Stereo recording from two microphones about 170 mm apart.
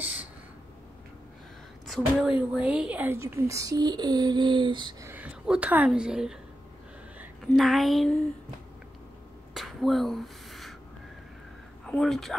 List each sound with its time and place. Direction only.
0.0 s a sound: 10° right (ahead or behind)
1.9 s speech: 5° left (ahead or behind)
2.2 s speech: 5° right (ahead or behind); by 4.9 s 30° right (ahead or behind)
5.0 s speech: 10° right (ahead or behind)
9.5 s a sound: centre (ahead or behind)
11.8 s speech: 5° left (ahead or behind)